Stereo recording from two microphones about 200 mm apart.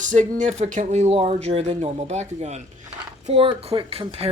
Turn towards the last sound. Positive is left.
turn(degrees=-30)  # may be behind; listen again after turning